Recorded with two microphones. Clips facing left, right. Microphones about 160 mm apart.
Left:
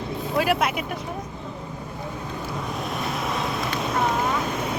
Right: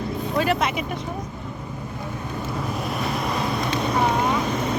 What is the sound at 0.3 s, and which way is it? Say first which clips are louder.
Speech: even; 10° left (ahead or behind).